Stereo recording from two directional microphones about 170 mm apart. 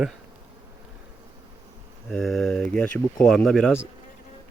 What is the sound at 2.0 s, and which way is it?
Speech, centre (ahead or behind).